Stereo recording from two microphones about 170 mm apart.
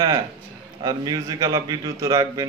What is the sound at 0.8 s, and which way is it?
A man's voice, 20° right (ahead or behind).